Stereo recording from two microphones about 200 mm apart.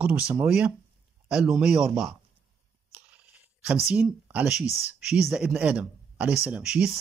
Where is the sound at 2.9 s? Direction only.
5° right (ahead or behind).